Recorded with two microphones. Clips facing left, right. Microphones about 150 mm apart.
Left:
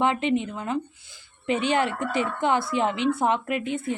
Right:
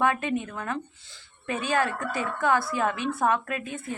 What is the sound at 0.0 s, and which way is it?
A woman's voice, 20° left (ahead or behind).